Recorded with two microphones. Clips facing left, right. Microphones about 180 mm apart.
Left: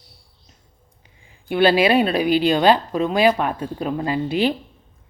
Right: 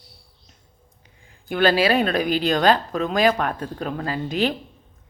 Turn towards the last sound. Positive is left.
turn(degrees=10)  # may be behind; listen again after turning